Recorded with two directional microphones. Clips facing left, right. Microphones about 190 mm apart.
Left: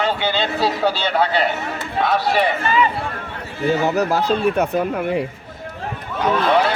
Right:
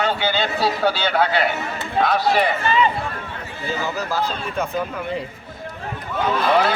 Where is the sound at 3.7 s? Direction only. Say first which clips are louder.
Left 8 dB; 65° left (ahead or behind).